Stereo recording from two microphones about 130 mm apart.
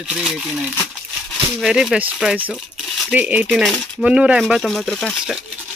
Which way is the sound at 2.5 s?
Centre (ahead or behind).